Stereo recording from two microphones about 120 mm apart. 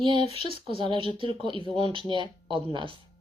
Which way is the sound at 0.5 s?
45° right (ahead or behind).